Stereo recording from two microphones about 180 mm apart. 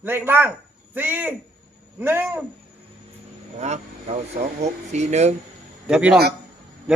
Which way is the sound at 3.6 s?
40° right (ahead or behind).